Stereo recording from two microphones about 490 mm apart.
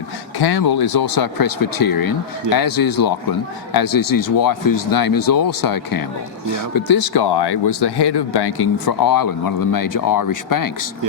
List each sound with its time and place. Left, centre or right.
0.3 s speech: left